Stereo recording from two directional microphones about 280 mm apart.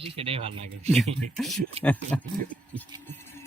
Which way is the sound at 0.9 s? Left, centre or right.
Centre.